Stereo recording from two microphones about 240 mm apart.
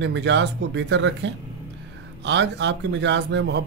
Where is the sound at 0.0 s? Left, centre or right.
Right.